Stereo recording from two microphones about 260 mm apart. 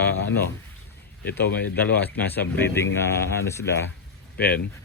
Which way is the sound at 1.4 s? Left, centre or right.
Left.